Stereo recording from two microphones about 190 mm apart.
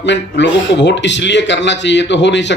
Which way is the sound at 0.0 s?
70° left (ahead or behind).